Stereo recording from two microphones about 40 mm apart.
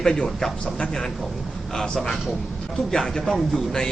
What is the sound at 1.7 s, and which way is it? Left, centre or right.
A man's voice, centre.